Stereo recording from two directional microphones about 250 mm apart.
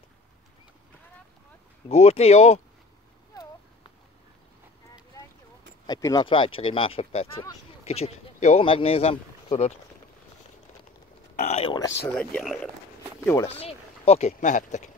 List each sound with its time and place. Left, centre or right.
1.9 s speech: left
5.9 s speech: centre
11.3 s speech: left
12.1 s speech: centre
13.5 s speech: left